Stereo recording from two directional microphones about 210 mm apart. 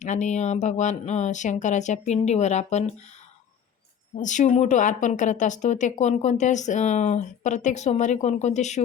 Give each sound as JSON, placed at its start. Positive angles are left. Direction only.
{"t": 0.0, "sound": "speech", "side_deg": 35}
{"t": 4.2, "sound": "speech", "side_deg": 35}